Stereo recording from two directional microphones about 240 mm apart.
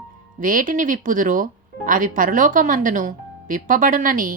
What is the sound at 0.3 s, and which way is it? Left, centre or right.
Speech, right.